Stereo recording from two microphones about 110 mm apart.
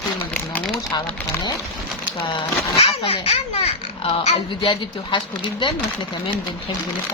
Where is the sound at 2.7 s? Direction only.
65° left (ahead or behind).